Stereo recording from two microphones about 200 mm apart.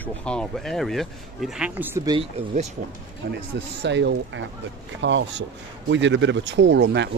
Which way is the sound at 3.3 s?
60° right (ahead or behind).